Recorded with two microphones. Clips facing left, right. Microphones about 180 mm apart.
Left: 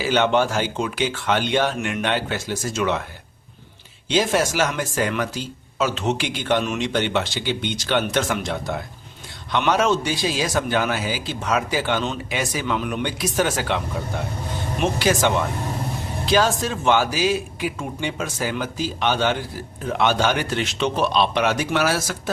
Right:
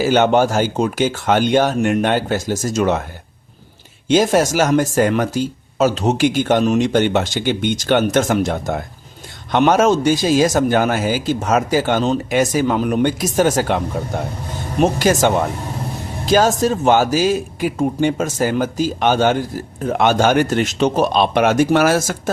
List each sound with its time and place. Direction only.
0.0 s speech: 45° right (ahead or behind)
4.1 s speech: 45° right (ahead or behind)